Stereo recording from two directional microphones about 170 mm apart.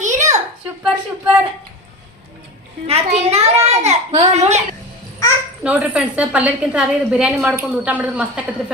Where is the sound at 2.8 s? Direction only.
40° right (ahead or behind).